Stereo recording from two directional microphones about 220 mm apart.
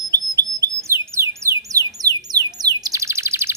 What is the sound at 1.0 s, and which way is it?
Music, 10° right (ahead or behind).